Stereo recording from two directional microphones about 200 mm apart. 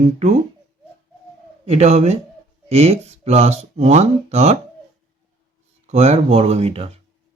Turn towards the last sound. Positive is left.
turn(degrees=-30)  # may be behind; listen again after turning